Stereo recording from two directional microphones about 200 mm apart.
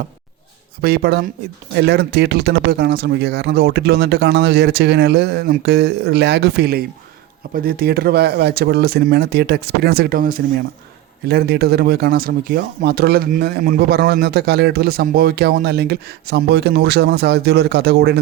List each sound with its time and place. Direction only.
0.8 s speech: 50° right (ahead or behind)